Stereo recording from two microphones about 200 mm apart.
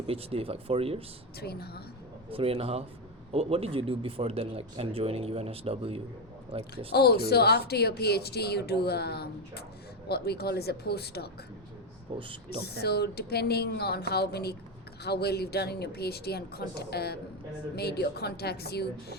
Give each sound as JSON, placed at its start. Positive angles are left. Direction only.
{"t": 0.1, "sound": "speech", "side_deg": -30}
{"t": 1.4, "sound": "speech", "side_deg": 50}
{"t": 2.3, "sound": "speech", "side_deg": -30}
{"t": 6.9, "sound": "speech", "side_deg": 55}
{"t": 12.1, "sound": "speech", "side_deg": -30}
{"t": 12.8, "sound": "speech", "side_deg": 55}